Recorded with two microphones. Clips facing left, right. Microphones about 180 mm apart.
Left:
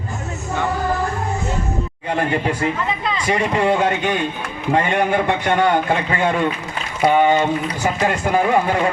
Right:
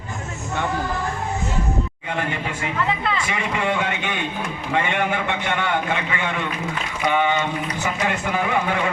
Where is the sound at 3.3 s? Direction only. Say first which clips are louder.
Left 11 dB; 40° left (ahead or behind).